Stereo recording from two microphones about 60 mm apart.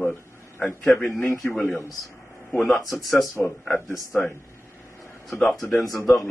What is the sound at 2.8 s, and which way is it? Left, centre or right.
Speech, left.